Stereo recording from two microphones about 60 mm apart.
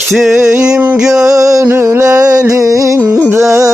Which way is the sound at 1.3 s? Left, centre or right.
Right.